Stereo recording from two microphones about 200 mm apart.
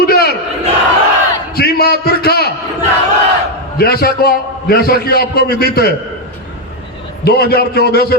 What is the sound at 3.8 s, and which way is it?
A man's voice, 50° left (ahead or behind).